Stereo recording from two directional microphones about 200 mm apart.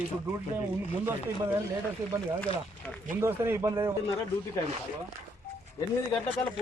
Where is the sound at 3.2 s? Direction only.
10° right (ahead or behind).